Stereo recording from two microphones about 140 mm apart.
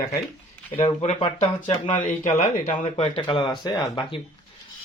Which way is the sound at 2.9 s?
45° left (ahead or behind).